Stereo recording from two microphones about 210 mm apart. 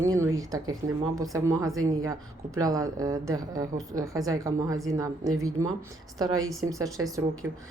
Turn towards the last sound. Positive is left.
turn(degrees=-10)  # may be behind; listen again after turning